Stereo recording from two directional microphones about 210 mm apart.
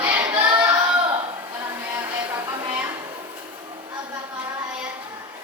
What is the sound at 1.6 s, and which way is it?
Music, 15° right (ahead or behind).